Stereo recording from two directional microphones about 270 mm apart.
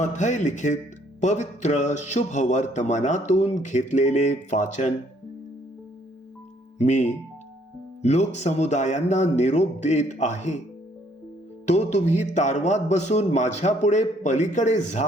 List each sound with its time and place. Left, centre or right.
0.0 s speech: left
6.7 s speech: left
11.6 s speech: left